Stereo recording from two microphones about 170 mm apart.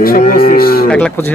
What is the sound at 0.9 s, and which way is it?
Speech, 5° left (ahead or behind).